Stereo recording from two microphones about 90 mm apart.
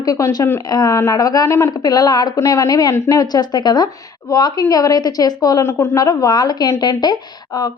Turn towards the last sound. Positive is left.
turn(degrees=50)  # may be behind; listen again after turning